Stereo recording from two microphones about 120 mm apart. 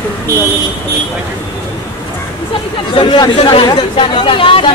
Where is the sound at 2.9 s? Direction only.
40° left (ahead or behind).